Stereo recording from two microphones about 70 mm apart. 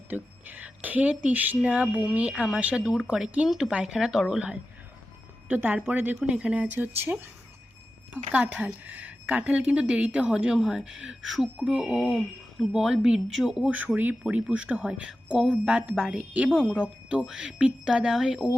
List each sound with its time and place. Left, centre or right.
0.1 s a woman's voice: right; by 4.4 s centre
5.5 s a woman's voice: right; by 13.7 s centre
13.7 s a woman's voice: right
16.5 s speech: centre
16.7 s a woman's voice: centre